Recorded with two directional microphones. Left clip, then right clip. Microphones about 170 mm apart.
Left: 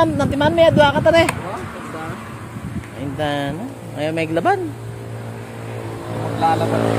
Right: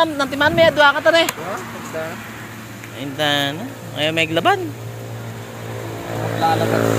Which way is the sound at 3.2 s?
15° left (ahead or behind).